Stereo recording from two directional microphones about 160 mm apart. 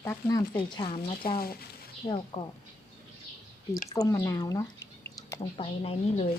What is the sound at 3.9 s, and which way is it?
Speech, 20° left (ahead or behind).